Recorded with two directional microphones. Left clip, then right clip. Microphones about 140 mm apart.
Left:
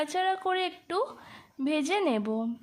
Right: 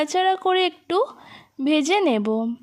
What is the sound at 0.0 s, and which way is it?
A woman's voice, 40° right (ahead or behind).